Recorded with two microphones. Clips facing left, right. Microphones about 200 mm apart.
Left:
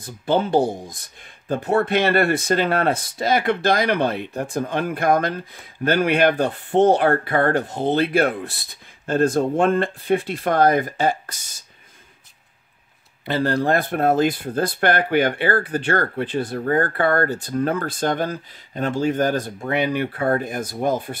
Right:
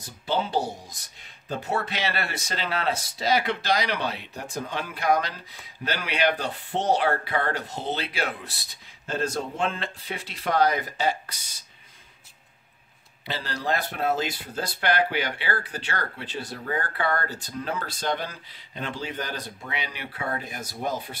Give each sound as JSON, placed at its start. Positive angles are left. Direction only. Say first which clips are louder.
{"t": 0.0, "sound": "speech", "louder": "left 7 dB", "side_deg": 55}
{"t": 13.2, "sound": "speech", "louder": "left 12 dB", "side_deg": 55}